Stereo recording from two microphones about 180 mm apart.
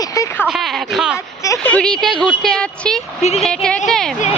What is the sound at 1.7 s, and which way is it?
Speech, 5° left (ahead or behind).